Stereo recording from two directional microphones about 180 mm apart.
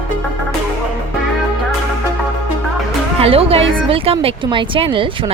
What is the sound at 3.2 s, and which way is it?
A woman's voice, 30° right (ahead or behind).